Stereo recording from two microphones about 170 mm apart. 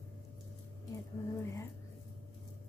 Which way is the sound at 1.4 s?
15° left (ahead or behind).